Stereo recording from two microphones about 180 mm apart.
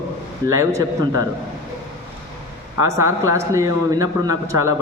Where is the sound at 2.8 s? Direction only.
15° right (ahead or behind).